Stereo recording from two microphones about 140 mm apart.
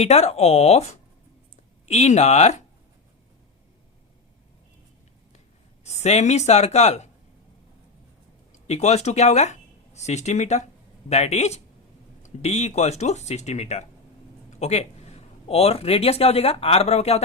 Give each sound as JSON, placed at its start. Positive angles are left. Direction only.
{"t": 0.0, "sound": "speech", "side_deg": 50}
{"t": 5.8, "sound": "speech", "side_deg": 50}
{"t": 8.6, "sound": "speech", "side_deg": 55}